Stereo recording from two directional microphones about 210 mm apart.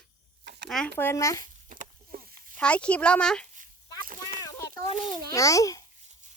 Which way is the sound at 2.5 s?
5° left (ahead or behind).